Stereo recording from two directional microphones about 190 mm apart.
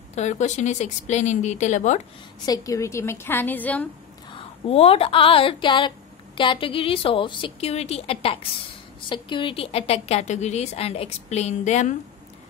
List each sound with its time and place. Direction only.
0.1 s a woman's voice: 40° left (ahead or behind)
2.4 s a woman's voice: 20° left (ahead or behind)
4.6 s a woman's voice: 30° left (ahead or behind)